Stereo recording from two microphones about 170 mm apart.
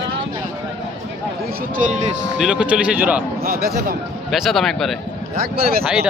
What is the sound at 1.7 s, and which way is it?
Speech, 50° right (ahead or behind).